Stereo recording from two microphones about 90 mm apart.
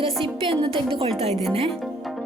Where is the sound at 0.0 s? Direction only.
90° right.